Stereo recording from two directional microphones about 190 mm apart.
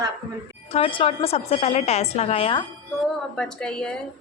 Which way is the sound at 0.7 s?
30° left (ahead or behind).